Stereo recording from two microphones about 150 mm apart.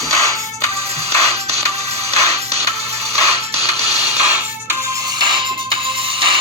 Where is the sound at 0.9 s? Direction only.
45° right (ahead or behind).